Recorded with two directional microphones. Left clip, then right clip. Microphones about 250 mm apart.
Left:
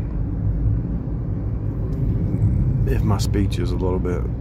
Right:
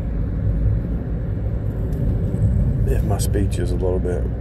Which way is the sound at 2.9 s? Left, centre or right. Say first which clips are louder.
Even; centre.